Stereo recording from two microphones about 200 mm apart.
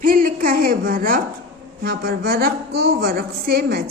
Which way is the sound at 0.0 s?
45° right (ahead or behind).